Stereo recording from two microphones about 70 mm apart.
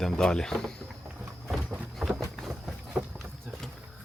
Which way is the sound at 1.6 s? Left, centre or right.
Centre.